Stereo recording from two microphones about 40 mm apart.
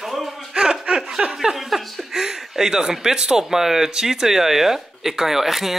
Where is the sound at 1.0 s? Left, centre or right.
Centre.